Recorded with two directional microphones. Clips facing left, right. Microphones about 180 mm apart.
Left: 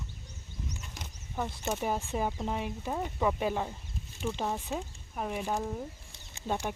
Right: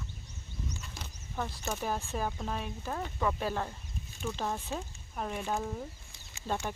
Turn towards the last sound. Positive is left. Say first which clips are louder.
# left 2 dB
turn(degrees=10)  # may be behind; listen again after turning